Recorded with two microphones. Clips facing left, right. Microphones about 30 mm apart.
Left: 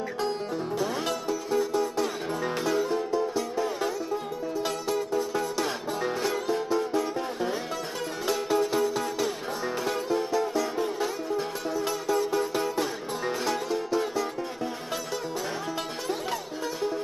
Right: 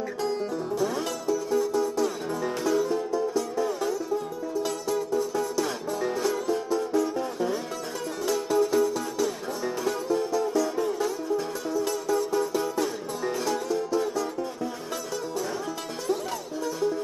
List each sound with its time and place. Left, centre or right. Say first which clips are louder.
0.2 s music: right 1 dB; left